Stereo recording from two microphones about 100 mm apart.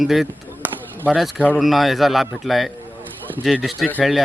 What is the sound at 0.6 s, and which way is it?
Basketball bounce, 20° right (ahead or behind).